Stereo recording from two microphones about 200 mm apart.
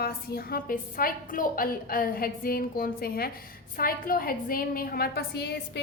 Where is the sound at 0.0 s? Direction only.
50° left (ahead or behind).